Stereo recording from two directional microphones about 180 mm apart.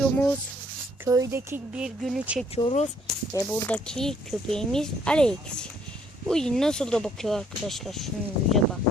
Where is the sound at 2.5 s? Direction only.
35° left (ahead or behind).